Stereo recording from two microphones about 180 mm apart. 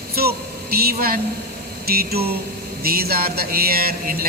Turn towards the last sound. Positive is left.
turn(degrees=-55)  # may be behind; listen again after turning